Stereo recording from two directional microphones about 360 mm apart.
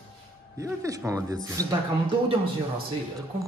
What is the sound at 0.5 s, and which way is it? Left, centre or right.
Speech, centre.